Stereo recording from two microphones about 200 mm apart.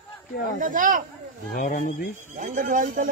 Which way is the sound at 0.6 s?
40° right (ahead or behind).